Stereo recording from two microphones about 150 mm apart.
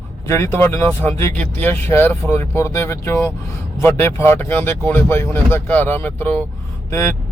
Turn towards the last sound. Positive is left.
turn(degrees=15)  # may be behind; listen again after turning